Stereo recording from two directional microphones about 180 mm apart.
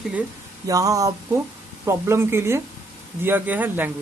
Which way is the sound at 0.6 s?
20° right (ahead or behind).